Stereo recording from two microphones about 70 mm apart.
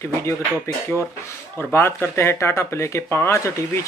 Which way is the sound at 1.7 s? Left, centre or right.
Left.